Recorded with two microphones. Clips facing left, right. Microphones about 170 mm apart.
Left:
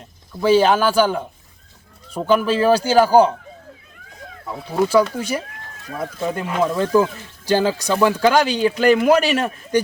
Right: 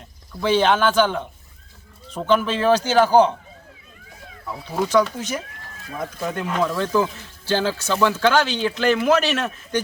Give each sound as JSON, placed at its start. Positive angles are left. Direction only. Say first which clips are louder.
{"t": 0.4, "sound": "speech", "louder": "left 3 dB", "side_deg": 5}
{"t": 4.5, "sound": "speech", "louder": "left 3 dB", "side_deg": 5}
{"t": 6.2, "sound": "speech", "louder": "left 3 dB", "side_deg": 5}